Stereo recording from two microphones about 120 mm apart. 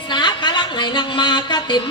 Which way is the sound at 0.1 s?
40° left (ahead or behind).